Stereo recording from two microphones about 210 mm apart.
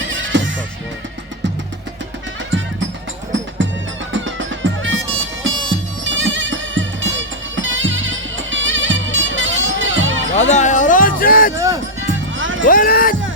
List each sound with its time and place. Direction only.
0.0 s music: 65° right (ahead or behind)
2.5 s music: 60° right (ahead or behind)
4.1 s bagpipes: 65° right (ahead or behind)
10.3 s music: 35° left (ahead or behind)
11.5 s music: 15° right (ahead or behind)
12.0 s music: 65° right (ahead or behind)
12.6 s speech: 40° left (ahead or behind)